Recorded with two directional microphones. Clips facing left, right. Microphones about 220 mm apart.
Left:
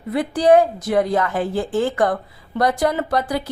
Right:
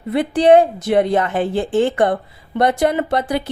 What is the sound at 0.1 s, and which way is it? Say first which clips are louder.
A woman's voice: right 3 dB; 25° right (ahead or behind).